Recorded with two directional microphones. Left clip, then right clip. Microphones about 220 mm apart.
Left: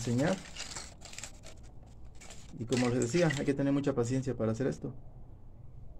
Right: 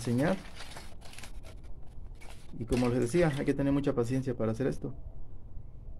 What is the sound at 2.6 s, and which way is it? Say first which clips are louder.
Speech: right 1 dB; 5° right (ahead or behind).